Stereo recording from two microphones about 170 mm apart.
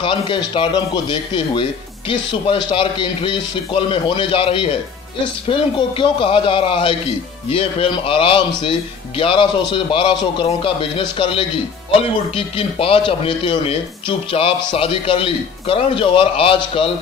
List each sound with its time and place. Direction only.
0.0 s speech: 30° left (ahead or behind)